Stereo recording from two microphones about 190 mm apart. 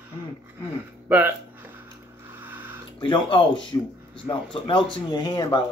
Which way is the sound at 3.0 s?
25° left (ahead or behind).